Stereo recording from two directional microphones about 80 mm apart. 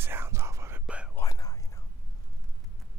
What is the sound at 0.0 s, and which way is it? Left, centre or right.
Whispering, right.